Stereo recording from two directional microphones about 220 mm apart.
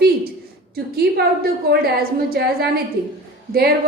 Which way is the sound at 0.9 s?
45° right (ahead or behind).